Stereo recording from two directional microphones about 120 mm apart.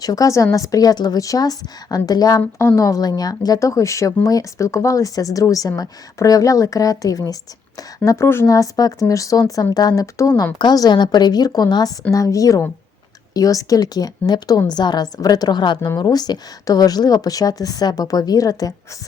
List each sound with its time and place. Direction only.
0.0 s a woman's voice: 30° left (ahead or behind)